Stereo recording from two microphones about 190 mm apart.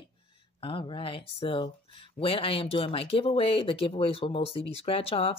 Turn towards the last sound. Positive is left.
turn(degrees=30)  # may be behind; listen again after turning